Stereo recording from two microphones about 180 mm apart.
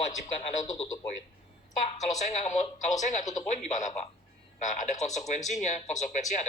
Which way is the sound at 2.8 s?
40° left (ahead or behind).